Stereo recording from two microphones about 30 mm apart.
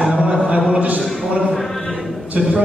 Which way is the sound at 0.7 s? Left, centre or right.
Right.